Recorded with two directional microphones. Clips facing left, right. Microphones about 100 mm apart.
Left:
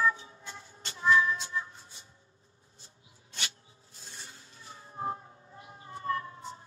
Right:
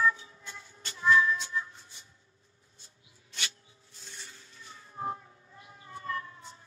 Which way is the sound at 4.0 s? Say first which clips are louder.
Even; 30° left (ahead or behind).